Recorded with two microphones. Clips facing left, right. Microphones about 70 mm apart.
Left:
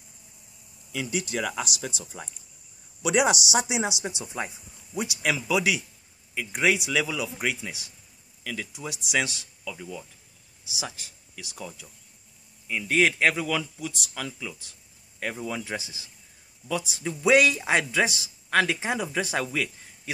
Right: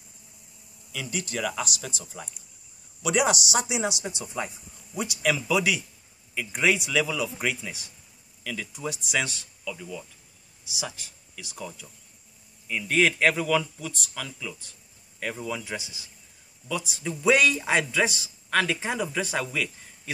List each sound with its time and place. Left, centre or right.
0.9 s a man's voice: centre
13.4 s a man's voice: centre
15.4 s a man's voice: left